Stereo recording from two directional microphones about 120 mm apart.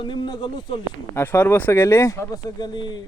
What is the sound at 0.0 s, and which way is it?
Speech, 40° left (ahead or behind).